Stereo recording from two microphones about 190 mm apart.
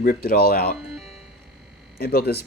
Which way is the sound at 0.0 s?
50° left (ahead or behind).